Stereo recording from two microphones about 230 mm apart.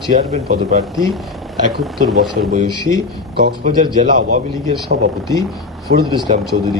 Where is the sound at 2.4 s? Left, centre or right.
Right.